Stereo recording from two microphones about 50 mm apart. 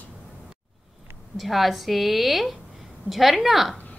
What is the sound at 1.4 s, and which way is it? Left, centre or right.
A woman's voice, centre.